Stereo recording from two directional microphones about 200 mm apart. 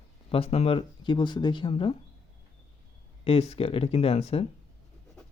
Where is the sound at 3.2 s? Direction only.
30° left (ahead or behind).